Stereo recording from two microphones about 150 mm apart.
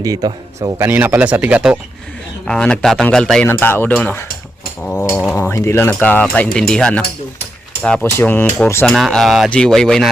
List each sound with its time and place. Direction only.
0.0 s a man's voice: 25° right (ahead or behind)
0.9 s speech: 15° right (ahead or behind)
2.5 s speech: 5° left (ahead or behind)
8.9 s speech: centre (ahead or behind)